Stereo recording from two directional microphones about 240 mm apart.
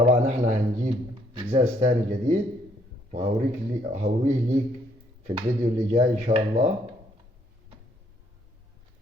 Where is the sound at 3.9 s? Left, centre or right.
Right.